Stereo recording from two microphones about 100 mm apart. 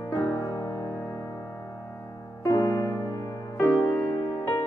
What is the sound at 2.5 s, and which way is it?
Music, 35° left (ahead or behind).